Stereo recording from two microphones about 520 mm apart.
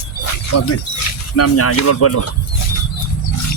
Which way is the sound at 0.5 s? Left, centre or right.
Left.